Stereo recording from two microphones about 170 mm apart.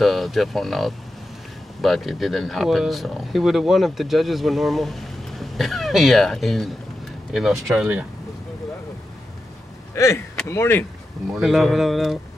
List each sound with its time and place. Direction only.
0.0 s speech: centre (ahead or behind)
9.9 s speech: 15° left (ahead or behind)
11.3 s speech: centre (ahead or behind)